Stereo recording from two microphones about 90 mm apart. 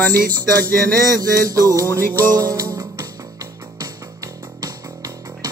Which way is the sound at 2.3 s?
45° right (ahead or behind).